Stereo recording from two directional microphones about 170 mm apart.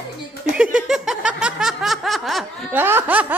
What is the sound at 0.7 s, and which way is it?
Snicker, 5° right (ahead or behind).